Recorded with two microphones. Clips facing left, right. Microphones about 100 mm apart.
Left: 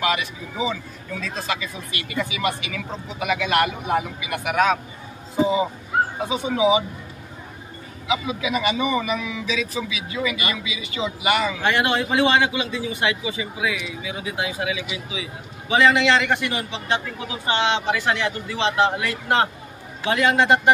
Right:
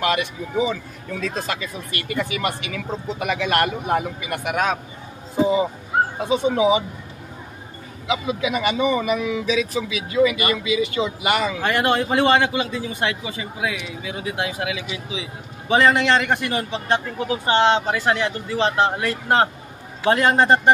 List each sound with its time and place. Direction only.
0.0 s speech: 45° right (ahead or behind)
6.2 s speech: 40° right (ahead or behind)
8.4 s speech: 45° right (ahead or behind)